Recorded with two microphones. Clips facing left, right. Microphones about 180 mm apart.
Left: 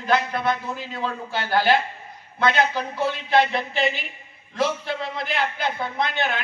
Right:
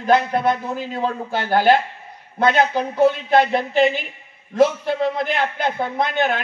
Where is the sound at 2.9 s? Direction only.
50° right (ahead or behind).